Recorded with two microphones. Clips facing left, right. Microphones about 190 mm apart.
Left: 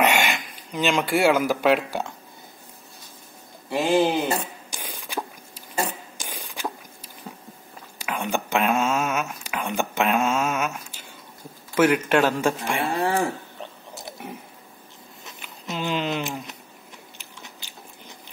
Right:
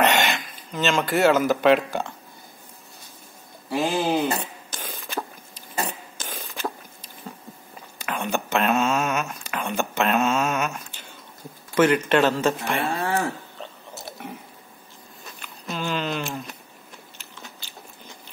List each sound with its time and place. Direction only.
0.0 s speech: 10° left (ahead or behind)
3.7 s speech: centre (ahead or behind)
4.3 s zipper: 10° left (ahead or behind)
5.9 s a sound: 10° left (ahead or behind)
8.0 s whispering: 10° left (ahead or behind)
11.7 s speech: 10° left (ahead or behind)
15.2 s a sound: 20° left (ahead or behind)
17.2 s biting: 15° left (ahead or behind)